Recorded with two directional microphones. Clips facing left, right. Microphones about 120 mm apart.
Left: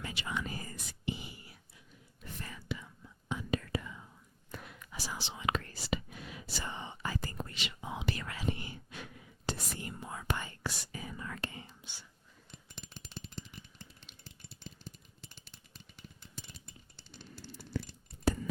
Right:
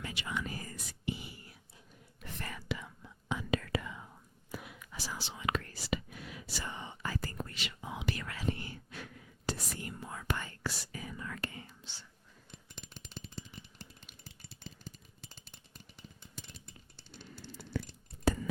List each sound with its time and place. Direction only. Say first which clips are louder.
0.0 s whispering: even; 30° left (ahead or behind)
2.2 s whispering: right 2 dB; 75° right (ahead or behind)
4.5 s whispering: right 2 dB; 5° right (ahead or behind)
4.9 s whispering: left 1 dB; 20° left (ahead or behind)
11.8 s whispering: even; 15° left (ahead or behind)